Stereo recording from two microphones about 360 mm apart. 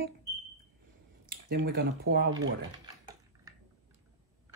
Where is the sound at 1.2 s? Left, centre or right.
Right.